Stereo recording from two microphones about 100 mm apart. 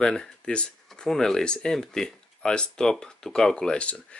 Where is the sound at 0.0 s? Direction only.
10° left (ahead or behind).